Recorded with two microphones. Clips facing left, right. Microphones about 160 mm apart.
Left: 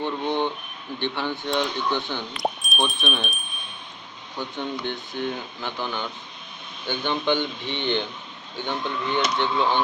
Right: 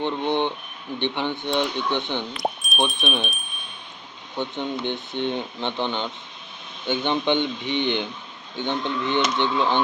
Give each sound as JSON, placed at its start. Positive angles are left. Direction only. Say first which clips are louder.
{"t": 0.0, "sound": "speech", "louder": "right 2 dB", "side_deg": -20}
{"t": 2.4, "sound": "speech", "louder": "left 1 dB", "side_deg": 0}
{"t": 4.4, "sound": "speech", "louder": "right 3 dB", "side_deg": -20}